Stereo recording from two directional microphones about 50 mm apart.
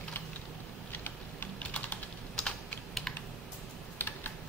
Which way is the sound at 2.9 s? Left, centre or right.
Centre.